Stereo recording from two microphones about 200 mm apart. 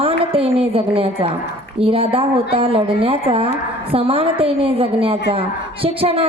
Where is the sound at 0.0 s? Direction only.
25° right (ahead or behind).